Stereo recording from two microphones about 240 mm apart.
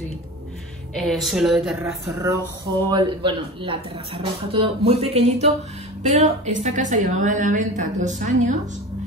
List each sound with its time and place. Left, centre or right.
0.9 s speech: centre
2.9 s a woman's voice: centre